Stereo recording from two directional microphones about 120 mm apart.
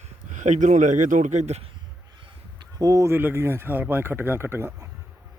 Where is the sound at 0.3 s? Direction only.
90° right; by 1.6 s 70° right (ahead or behind).